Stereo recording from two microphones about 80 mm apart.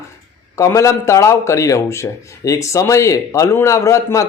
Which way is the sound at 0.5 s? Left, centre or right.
Left.